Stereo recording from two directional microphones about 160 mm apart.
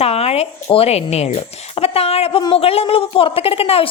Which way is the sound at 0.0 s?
40° left (ahead or behind).